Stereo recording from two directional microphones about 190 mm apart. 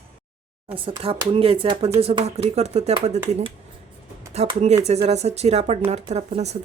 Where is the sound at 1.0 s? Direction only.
30° right (ahead or behind).